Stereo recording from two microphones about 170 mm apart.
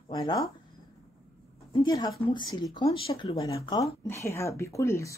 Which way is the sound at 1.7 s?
25° left (ahead or behind).